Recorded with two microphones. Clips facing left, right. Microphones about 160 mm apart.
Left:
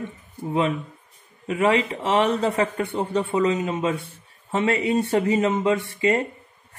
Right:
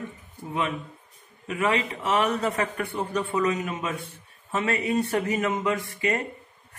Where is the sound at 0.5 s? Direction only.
30° left (ahead or behind).